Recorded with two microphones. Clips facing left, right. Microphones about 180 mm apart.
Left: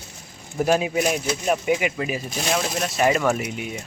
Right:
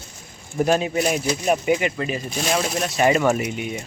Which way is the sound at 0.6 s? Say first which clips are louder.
Right 1 dB; 5° left (ahead or behind).